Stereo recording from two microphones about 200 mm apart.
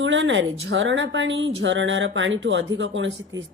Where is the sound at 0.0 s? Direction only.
70° right (ahead or behind).